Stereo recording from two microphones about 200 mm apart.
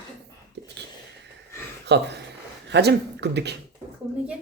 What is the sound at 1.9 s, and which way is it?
Speech, 60° right (ahead or behind).